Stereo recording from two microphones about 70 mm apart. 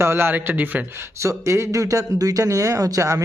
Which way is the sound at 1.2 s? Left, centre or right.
Right.